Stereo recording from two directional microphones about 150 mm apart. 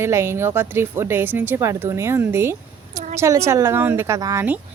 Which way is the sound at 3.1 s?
20° right (ahead or behind).